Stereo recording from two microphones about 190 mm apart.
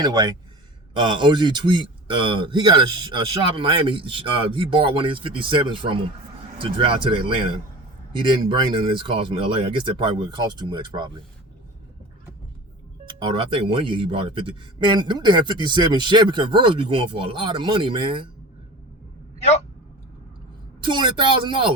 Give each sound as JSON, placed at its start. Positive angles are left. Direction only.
{"t": 0.0, "sound": "speech", "side_deg": -20}
{"t": 13.1, "sound": "speech", "side_deg": -25}
{"t": 20.8, "sound": "speech", "side_deg": -25}